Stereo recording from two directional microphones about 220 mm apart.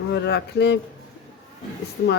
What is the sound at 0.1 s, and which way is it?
Speech, 50° left (ahead or behind).